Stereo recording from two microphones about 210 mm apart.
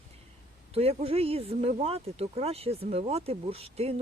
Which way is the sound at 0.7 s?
30° right (ahead or behind).